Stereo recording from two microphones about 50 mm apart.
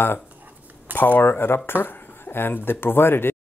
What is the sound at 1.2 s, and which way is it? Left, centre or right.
Speech, left.